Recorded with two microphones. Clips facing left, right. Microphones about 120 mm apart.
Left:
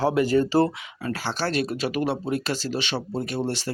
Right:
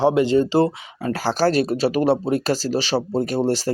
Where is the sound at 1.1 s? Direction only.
40° right (ahead or behind).